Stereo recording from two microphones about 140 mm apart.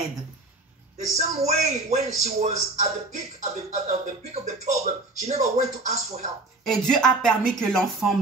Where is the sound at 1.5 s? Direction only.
55° right (ahead or behind).